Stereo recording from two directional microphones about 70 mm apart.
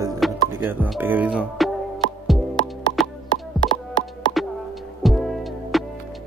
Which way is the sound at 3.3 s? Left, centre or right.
Left.